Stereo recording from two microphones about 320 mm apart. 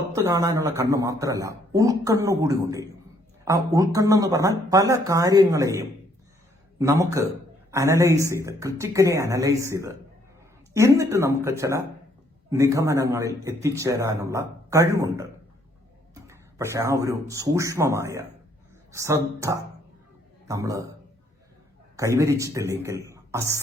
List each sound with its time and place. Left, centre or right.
0.1 s speech: centre
16.2 s speech: centre
21.9 s speech: centre